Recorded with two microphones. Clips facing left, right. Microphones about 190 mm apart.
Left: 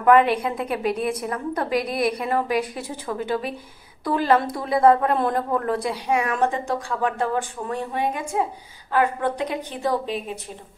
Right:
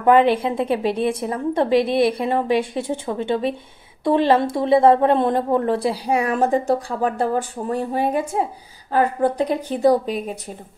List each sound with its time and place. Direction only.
0.0 s a woman's voice: 30° right (ahead or behind)